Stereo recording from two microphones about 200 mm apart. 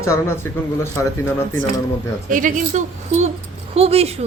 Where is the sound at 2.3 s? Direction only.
40° right (ahead or behind).